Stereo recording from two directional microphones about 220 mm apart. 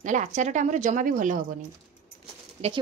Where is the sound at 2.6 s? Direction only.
30° right (ahead or behind).